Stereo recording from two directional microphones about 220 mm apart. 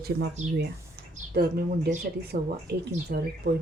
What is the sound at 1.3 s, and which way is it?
Speech, 45° right (ahead or behind).